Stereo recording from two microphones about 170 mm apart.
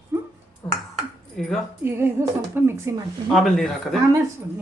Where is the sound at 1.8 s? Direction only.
15° right (ahead or behind).